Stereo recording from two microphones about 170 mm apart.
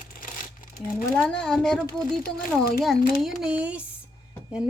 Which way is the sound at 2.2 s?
60° left (ahead or behind).